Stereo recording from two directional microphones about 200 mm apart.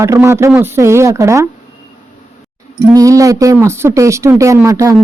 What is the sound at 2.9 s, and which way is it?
Speech, 15° right (ahead or behind).